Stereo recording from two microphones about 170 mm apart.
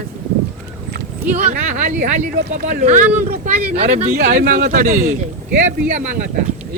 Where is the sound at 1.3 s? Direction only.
45° right (ahead or behind).